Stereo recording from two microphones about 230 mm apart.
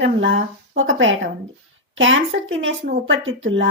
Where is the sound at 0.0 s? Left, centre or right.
Right.